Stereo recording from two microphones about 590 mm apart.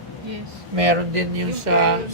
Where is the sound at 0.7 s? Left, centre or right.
Right.